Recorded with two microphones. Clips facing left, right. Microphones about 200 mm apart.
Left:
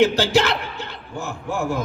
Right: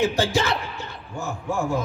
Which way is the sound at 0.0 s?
70° left (ahead or behind).